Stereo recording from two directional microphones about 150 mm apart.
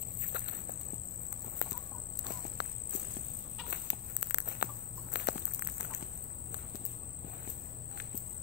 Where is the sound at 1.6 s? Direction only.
90° left.